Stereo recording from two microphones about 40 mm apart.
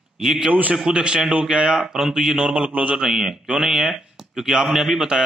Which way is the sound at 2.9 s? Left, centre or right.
Centre.